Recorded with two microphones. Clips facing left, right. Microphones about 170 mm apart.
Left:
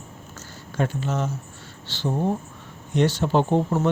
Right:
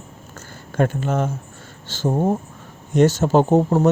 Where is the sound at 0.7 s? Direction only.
50° right (ahead or behind).